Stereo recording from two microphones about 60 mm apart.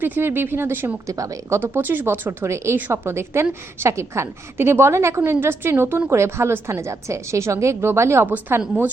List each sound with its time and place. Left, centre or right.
0.0 s speech: right
1.0 s a woman's voice: right
1.5 s a woman's voice: right
8.3 s speech: right